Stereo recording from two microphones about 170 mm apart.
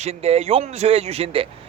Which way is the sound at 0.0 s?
35° right (ahead or behind).